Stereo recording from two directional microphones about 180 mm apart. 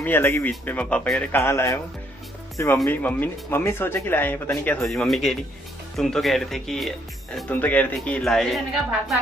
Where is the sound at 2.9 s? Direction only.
10° left (ahead or behind).